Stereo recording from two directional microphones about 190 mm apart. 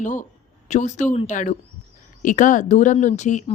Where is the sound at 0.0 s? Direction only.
40° left (ahead or behind).